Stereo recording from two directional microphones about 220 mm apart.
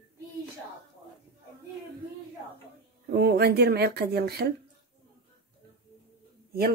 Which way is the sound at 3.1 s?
50° right (ahead or behind).